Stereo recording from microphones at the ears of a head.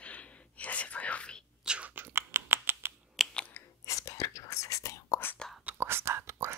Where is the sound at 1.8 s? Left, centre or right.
Right.